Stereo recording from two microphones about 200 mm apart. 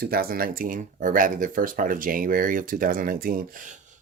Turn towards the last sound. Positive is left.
turn(degrees=-40)  # may be behind; listen again after turning